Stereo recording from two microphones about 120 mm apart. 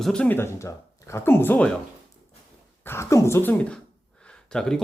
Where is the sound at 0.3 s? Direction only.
20° left (ahead or behind).